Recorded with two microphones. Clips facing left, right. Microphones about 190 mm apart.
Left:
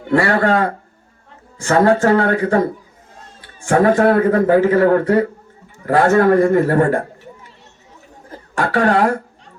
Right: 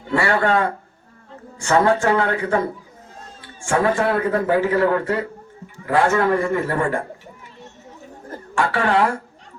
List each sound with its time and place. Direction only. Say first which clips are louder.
0.2 s speech: left 2 dB; 40° left (ahead or behind)
1.7 s speech: left 4 dB; 40° left (ahead or behind)
3.7 s a man's voice: left 6 dB; 40° left (ahead or behind)
8.6 s a man's voice: left 4 dB; 40° left (ahead or behind)